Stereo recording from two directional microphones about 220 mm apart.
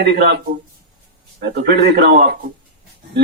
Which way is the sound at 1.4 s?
45° right (ahead or behind).